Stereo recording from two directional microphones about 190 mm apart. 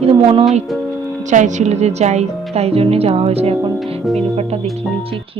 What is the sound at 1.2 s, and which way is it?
Speech, 40° right (ahead or behind).